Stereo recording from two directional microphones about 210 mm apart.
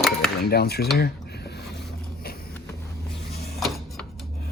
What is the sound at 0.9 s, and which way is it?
Cutlery, 50° left (ahead or behind).